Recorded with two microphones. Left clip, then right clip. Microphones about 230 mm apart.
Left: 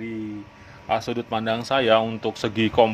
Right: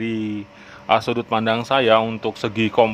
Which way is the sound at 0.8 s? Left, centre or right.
Centre.